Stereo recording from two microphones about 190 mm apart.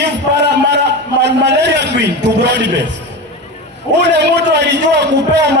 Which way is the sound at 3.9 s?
65° right (ahead or behind).